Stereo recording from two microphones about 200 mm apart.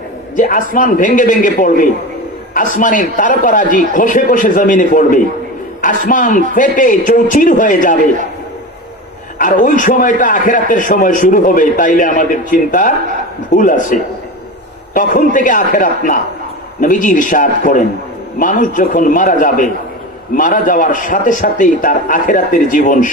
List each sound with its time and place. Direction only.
0.4 s a man's voice: 40° left (ahead or behind)
9.4 s a man's voice: 40° left (ahead or behind)
15.0 s a man's voice: 40° left (ahead or behind)